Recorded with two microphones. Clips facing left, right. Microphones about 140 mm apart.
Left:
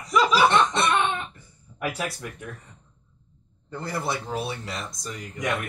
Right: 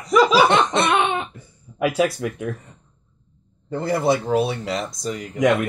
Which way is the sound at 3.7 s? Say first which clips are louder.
Right 10 dB; 70° right (ahead or behind).